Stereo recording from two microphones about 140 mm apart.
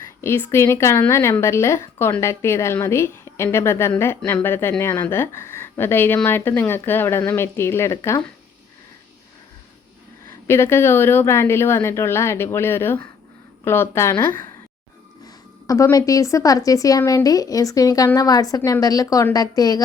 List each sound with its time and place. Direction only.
0.2 s a woman's voice: 20° left (ahead or behind)
10.4 s speech: 20° left (ahead or behind)
15.6 s a woman's voice: 25° left (ahead or behind)